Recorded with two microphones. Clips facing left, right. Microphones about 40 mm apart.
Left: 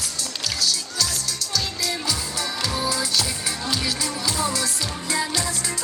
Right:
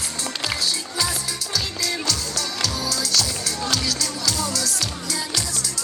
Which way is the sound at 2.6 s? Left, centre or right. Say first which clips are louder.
Left 3 dB; left.